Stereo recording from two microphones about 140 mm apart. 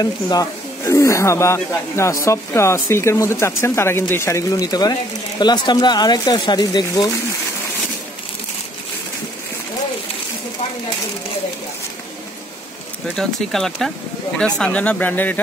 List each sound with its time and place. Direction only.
0.0 s speech: 25° left (ahead or behind)
13.1 s speech: 5° left (ahead or behind)